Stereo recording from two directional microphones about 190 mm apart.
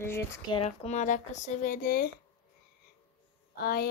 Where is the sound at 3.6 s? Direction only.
55° left (ahead or behind).